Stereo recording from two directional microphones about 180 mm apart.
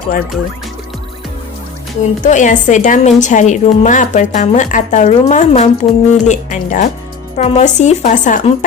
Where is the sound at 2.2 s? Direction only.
45° left (ahead or behind).